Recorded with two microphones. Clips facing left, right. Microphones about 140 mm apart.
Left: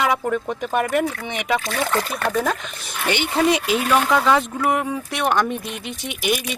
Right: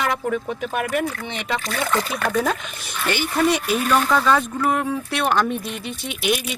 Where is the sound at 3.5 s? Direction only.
90° left.